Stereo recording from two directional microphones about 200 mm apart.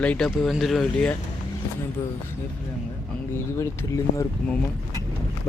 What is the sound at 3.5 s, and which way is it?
Speech, 15° left (ahead or behind).